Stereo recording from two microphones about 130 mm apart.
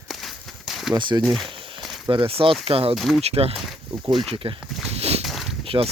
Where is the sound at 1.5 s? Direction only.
40° right (ahead or behind).